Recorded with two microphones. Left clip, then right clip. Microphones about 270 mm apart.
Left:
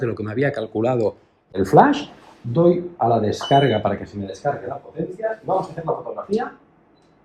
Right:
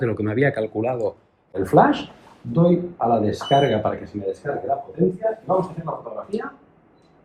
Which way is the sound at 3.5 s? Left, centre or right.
Left.